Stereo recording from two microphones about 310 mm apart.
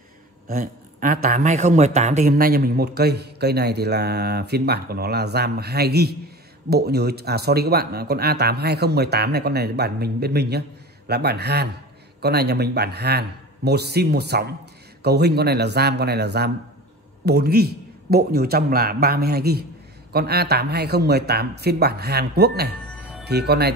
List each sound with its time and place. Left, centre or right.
0.5 s speech: right